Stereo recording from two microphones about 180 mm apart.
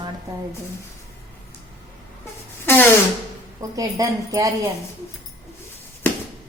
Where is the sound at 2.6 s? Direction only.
10° left (ahead or behind).